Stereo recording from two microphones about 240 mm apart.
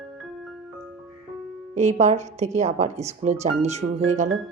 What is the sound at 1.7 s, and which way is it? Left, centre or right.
Speech, right.